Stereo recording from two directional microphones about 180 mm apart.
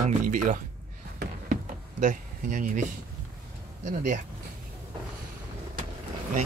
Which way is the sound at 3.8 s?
45° right (ahead or behind).